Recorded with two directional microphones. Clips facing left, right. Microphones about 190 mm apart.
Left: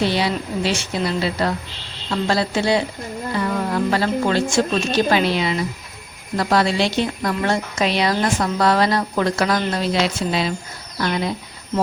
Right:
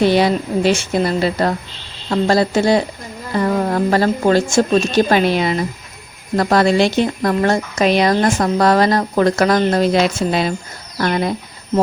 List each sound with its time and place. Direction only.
0.0 s speech: 50° right (ahead or behind)